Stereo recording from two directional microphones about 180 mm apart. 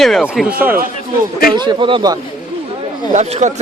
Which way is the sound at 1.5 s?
25° right (ahead or behind).